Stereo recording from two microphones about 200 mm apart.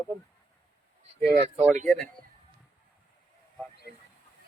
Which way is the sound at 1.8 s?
5° left (ahead or behind).